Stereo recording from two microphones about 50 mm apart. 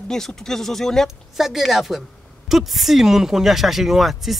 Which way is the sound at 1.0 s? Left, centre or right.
Centre.